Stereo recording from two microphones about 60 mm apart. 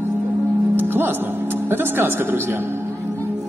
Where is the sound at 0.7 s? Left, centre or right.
Right.